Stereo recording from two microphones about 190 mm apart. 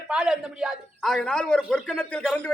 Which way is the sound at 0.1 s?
5° right (ahead or behind).